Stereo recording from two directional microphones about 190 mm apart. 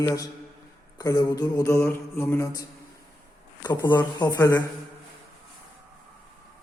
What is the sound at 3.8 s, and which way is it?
Speech, 10° left (ahead or behind).